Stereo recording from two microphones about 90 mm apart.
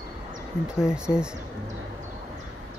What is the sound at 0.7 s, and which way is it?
Speech, 10° right (ahead or behind).